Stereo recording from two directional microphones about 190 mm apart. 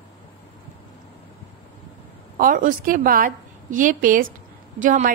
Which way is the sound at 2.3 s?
45° right (ahead or behind).